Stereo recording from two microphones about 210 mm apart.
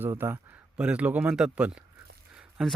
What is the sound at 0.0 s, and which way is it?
Speech, 10° right (ahead or behind).